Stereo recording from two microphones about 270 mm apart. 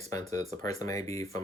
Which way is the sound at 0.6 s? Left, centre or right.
Centre.